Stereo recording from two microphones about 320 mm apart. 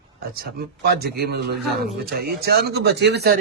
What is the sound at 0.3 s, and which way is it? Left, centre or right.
Speech, right.